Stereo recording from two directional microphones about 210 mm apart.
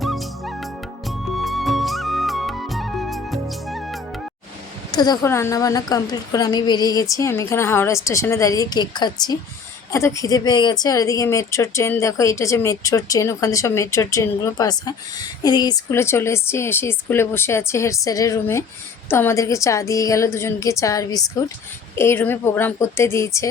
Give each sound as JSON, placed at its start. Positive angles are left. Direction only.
{"t": 0.0, "sound": "music", "side_deg": 0}
{"t": 4.9, "sound": "a woman's voice", "side_deg": 20}